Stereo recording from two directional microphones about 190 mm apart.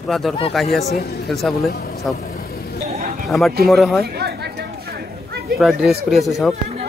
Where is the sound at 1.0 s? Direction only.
60° left (ahead or behind).